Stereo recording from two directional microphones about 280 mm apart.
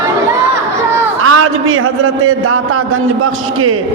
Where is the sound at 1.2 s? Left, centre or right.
Right.